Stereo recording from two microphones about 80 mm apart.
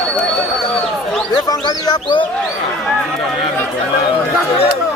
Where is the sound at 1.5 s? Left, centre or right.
Left.